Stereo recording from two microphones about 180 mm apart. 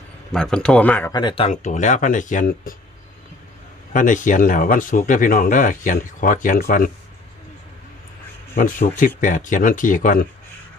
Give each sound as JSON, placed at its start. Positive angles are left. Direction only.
{"t": 0.3, "sound": "speech", "side_deg": 5}
{"t": 1.1, "sound": "speech", "side_deg": 25}
{"t": 1.5, "sound": "speech", "side_deg": 45}
{"t": 3.9, "sound": "speech", "side_deg": 45}
{"t": 8.5, "sound": "speech", "side_deg": 50}